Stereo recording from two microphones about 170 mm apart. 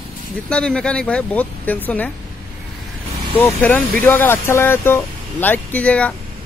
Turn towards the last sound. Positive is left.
turn(degrees=5)  # may be behind; listen again after turning